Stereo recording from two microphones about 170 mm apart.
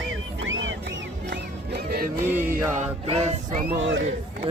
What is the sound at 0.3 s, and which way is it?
Music, 90° right.